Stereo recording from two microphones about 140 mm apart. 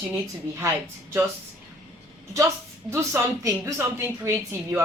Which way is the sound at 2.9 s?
20° right (ahead or behind).